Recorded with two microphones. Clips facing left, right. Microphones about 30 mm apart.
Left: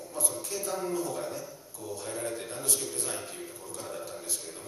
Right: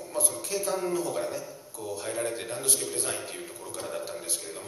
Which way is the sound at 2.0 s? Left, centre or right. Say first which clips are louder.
Right 4 dB; right.